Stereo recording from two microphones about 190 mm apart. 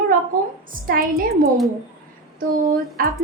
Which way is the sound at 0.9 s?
50° right (ahead or behind).